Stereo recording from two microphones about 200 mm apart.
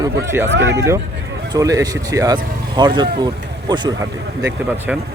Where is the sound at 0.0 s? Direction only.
15° right (ahead or behind).